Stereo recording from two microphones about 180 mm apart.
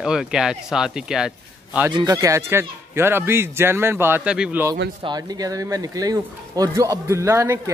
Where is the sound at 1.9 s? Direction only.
20° right (ahead or behind).